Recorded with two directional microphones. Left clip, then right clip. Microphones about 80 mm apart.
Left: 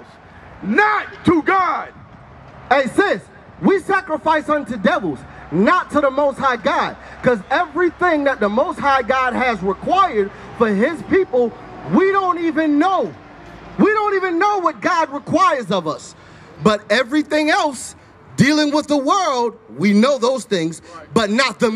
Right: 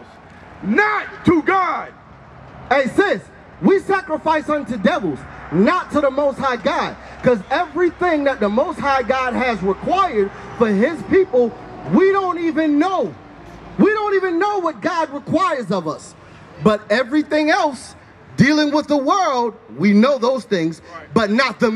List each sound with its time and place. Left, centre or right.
0.7 s a man's voice: left
15.2 s a man's voice: left